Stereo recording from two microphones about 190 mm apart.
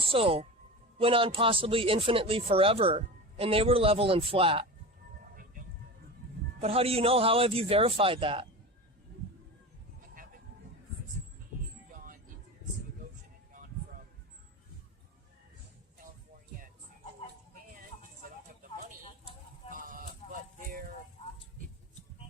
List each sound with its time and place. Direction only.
0.0 s speech: 30° right (ahead or behind)
6.6 s a man's voice: 30° right (ahead or behind)
13.5 s music: 45° right (ahead or behind)
19.7 s a sound: 45° right (ahead or behind)